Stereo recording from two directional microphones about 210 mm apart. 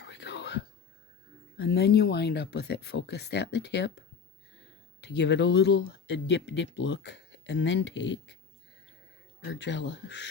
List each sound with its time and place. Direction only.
0.0 s whispering: 55° left (ahead or behind)
1.5 s speech: 50° left (ahead or behind)
9.4 s speech: 55° left (ahead or behind)